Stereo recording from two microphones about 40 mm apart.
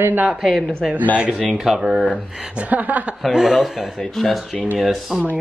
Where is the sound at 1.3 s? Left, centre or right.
Centre.